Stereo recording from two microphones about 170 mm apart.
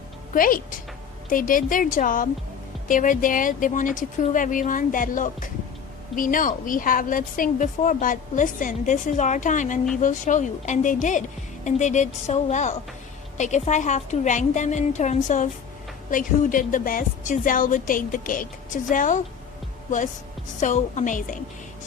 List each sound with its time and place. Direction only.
0.3 s a woman's voice: 55° left (ahead or behind)
20.6 s a woman's voice: 45° left (ahead or behind)